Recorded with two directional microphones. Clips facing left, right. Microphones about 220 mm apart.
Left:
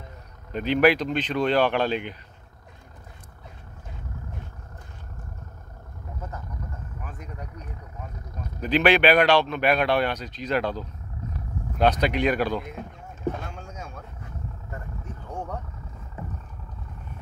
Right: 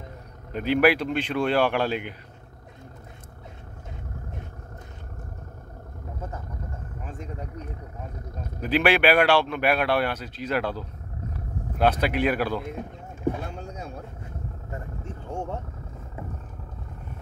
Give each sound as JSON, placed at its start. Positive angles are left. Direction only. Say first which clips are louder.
{"t": 0.5, "sound": "a man's voice", "louder": "left 1 dB", "side_deg": -10}
{"t": 7.0, "sound": "vehicle", "louder": "right 5 dB", "side_deg": -30}
{"t": 8.5, "sound": "a man's voice", "louder": "left 1 dB", "side_deg": -10}
{"t": 13.4, "sound": "a sound", "louder": "right 3 dB", "side_deg": -35}
{"t": 15.2, "sound": "vehicle", "louder": "right 2 dB", "side_deg": -25}